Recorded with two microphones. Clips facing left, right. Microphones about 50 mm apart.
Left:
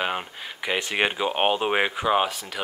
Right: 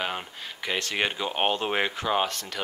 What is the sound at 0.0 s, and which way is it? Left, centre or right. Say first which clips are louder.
Speech: left 4 dB; centre.